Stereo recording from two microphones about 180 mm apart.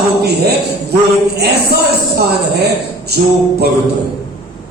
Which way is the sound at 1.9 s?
65° right (ahead or behind).